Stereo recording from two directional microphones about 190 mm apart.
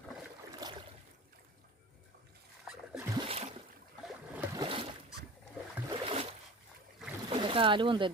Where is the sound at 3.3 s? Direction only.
35° right (ahead or behind).